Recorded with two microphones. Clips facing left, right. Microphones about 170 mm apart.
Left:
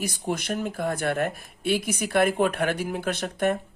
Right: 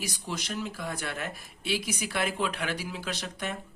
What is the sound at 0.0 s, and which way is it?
Speech, 55° left (ahead or behind).